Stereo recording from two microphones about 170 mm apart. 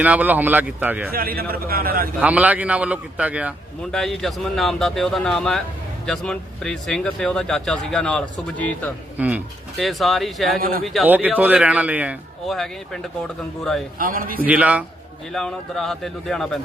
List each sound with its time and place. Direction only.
0.0 s speech: 10° right (ahead or behind)
1.1 s a man's voice: 60° right (ahead or behind)
2.2 s speech: 10° right (ahead or behind); by 8.9 s 10° left (ahead or behind)
9.1 s speech: 10° right (ahead or behind)
10.6 s a man's voice: 55° right (ahead or behind)
10.8 s speech: centre (ahead or behind)
14.0 s a man's voice: 55° right (ahead or behind)
14.4 s speech: 10° right (ahead or behind)
15.3 s speech: 5° left (ahead or behind)